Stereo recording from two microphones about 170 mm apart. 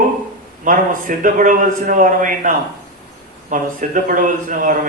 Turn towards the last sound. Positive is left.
turn(degrees=-50)  # may be behind; listen again after turning